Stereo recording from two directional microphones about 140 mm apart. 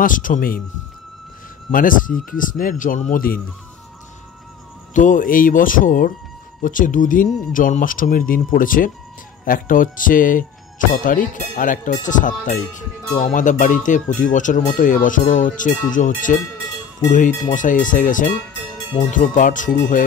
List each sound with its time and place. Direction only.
0.0 s speech: 70° left (ahead or behind)
1.7 s speech: 75° left (ahead or behind)
4.9 s speech: 65° left (ahead or behind)